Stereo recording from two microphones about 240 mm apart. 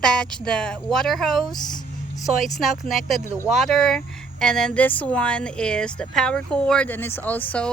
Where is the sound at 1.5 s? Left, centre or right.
Centre.